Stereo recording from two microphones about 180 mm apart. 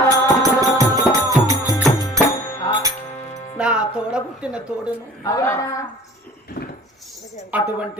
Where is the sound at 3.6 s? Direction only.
5° right (ahead or behind).